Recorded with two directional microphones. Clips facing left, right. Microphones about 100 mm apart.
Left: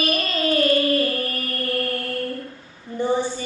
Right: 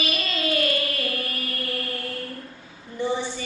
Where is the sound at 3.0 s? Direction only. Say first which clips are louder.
Left 4 dB; 40° left (ahead or behind).